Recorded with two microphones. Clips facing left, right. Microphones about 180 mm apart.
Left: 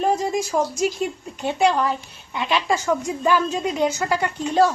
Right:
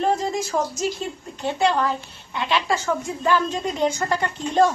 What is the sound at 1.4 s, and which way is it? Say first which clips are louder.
A woman's voice: left 2 dB; 15° left (ahead or behind).